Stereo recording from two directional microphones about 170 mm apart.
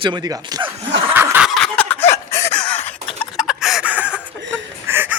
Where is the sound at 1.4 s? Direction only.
5° left (ahead or behind).